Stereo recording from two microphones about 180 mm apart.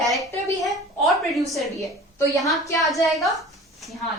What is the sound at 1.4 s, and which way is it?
Speech, centre (ahead or behind).